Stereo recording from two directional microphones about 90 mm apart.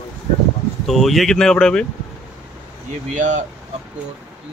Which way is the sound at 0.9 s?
Centre (ahead or behind).